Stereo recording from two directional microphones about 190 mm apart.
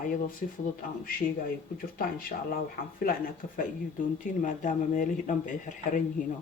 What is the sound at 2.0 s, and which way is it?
Speech, 50° left (ahead or behind).